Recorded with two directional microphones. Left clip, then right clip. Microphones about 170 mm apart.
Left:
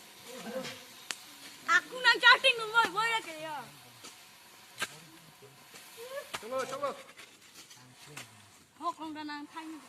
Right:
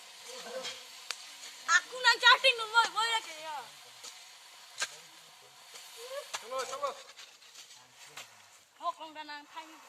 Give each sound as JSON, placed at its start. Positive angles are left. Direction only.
{"t": 0.3, "sound": "a sound", "side_deg": -50}
{"t": 6.3, "sound": "chop", "side_deg": -55}
{"t": 8.8, "sound": "speech", "side_deg": -30}